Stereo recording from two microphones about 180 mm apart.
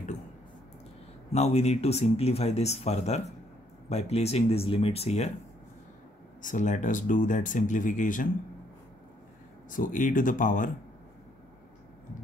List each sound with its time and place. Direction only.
1.3 s speech: 35° left (ahead or behind)
6.4 s speech: 45° left (ahead or behind)
9.7 s speech: 50° left (ahead or behind)